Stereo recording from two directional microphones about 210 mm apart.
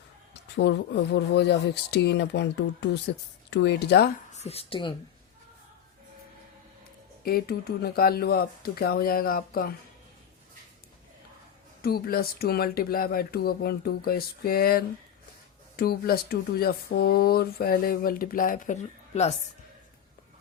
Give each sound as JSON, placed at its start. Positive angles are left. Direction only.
{"t": 0.5, "sound": "speech", "side_deg": 55}
{"t": 4.3, "sound": "a woman's voice", "side_deg": 30}
{"t": 7.3, "sound": "speech", "side_deg": 45}
{"t": 11.8, "sound": "speech", "side_deg": 45}